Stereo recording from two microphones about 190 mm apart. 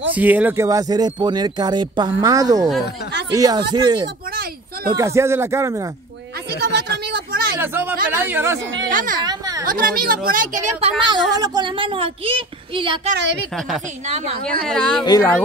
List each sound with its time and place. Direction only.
0.1 s speech: 10° right (ahead or behind)
6.6 s a sound: 60° right (ahead or behind)
7.5 s speech: 10° right (ahead or behind)
8.9 s a woman's voice: 45° right (ahead or behind)
9.2 s a sound: 20° right (ahead or behind)
9.7 s a woman's voice: 45° right (ahead or behind)
11.1 s speech: 20° right (ahead or behind)
14.0 s a woman's voice: 35° right (ahead or behind)
14.4 s a woman's voice: 5° left (ahead or behind)
15.0 s speech: 15° left (ahead or behind)